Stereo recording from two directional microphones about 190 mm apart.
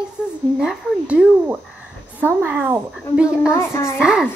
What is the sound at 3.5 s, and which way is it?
Speech, 15° left (ahead or behind).